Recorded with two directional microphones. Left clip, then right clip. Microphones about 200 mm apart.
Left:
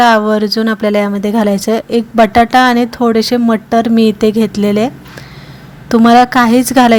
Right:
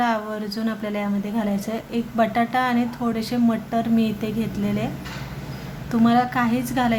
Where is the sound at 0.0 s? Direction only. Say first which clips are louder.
Left 15 dB; 45° left (ahead or behind).